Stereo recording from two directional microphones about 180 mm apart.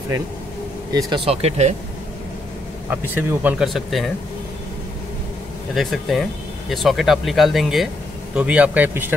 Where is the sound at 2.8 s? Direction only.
10° right (ahead or behind).